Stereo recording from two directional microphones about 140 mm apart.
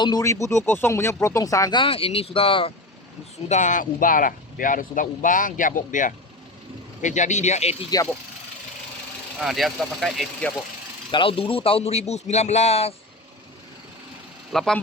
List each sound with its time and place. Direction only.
0.0 s speech: 25° left (ahead or behind)
1.8 s speech: 40° left (ahead or behind)
3.5 s speech: 60° left (ahead or behind)
9.4 s speech: centre (ahead or behind)
11.1 s a man's voice: 40° left (ahead or behind)
14.5 s speech: centre (ahead or behind)